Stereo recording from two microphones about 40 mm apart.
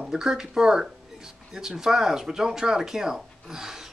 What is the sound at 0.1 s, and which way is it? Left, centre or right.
Speech, centre.